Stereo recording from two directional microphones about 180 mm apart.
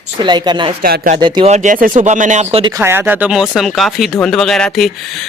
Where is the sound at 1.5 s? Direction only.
40° right (ahead or behind).